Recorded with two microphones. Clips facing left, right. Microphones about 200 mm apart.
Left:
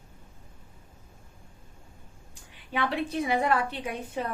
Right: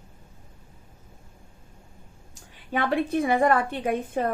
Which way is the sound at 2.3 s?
50° right (ahead or behind).